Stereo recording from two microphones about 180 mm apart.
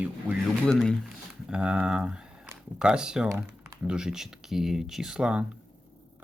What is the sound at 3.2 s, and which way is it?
Typing, 20° right (ahead or behind).